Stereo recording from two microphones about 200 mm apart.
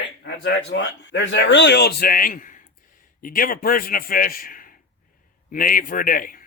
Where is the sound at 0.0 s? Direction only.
60° left (ahead or behind).